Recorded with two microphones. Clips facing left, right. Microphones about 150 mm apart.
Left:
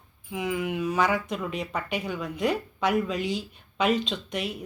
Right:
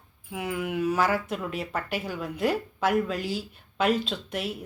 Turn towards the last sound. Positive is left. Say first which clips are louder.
# even
turn(degrees=-5)  # may be behind; listen again after turning